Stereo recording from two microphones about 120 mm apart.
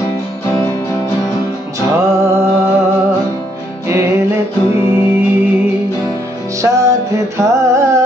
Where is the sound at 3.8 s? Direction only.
25° right (ahead or behind).